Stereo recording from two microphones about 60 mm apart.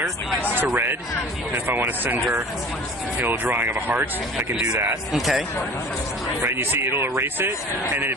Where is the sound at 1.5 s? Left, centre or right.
Right.